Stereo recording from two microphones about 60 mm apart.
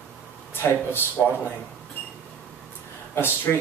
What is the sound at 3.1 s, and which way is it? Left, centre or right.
Speech, left.